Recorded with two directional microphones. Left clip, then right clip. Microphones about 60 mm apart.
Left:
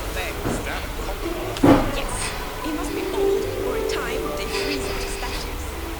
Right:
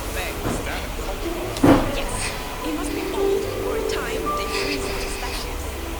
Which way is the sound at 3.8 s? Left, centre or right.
Centre.